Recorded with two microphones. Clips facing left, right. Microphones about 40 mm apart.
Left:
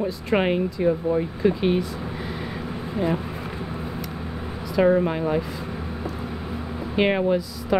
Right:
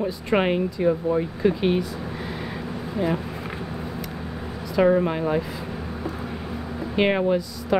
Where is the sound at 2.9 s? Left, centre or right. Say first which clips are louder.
Even; centre.